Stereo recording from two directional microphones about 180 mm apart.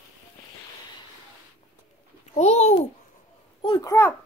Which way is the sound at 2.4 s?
40° left (ahead or behind).